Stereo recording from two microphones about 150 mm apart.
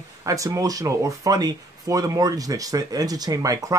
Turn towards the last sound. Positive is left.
turn(degrees=-25)  # may be behind; listen again after turning